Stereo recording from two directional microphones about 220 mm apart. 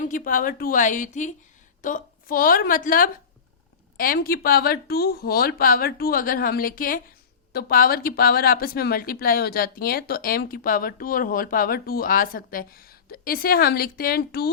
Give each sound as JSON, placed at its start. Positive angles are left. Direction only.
{"t": 0.0, "sound": "a woman's voice", "side_deg": 35}